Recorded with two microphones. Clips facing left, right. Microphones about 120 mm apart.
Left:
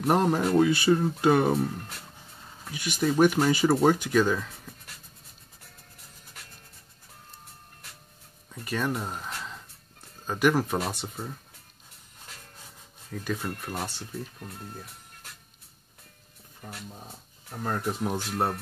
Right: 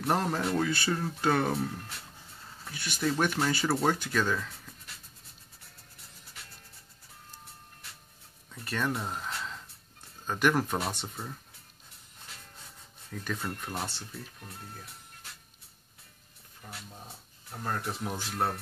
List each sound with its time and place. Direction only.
0.0 s speech: 15° left (ahead or behind)
8.5 s speech: 10° left (ahead or behind)
13.2 s speech: 5° left (ahead or behind)
17.6 s speech: 30° left (ahead or behind)